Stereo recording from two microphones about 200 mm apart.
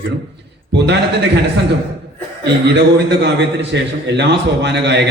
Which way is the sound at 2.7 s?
60° right (ahead or behind).